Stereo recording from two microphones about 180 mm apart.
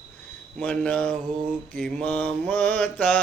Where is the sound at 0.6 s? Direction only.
5° left (ahead or behind).